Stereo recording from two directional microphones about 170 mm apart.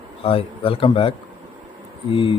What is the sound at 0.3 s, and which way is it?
Speech, 35° left (ahead or behind).